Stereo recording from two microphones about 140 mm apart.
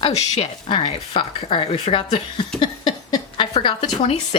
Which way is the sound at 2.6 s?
35° left (ahead or behind).